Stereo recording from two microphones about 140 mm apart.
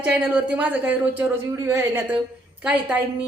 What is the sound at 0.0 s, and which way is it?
A woman's voice, 10° right (ahead or behind).